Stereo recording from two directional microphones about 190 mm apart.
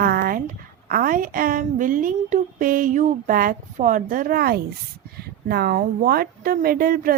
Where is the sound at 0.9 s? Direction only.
50° right (ahead or behind).